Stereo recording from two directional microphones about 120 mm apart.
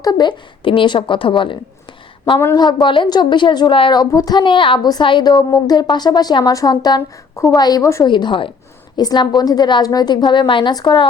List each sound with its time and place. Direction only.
0.0 s a woman's voice: 35° left (ahead or behind)
2.6 s a woman's voice: 35° left (ahead or behind)
8.0 s a woman's voice: 40° left (ahead or behind)